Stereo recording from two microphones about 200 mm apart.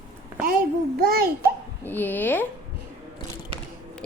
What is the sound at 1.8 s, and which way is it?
Speech, 10° left (ahead or behind).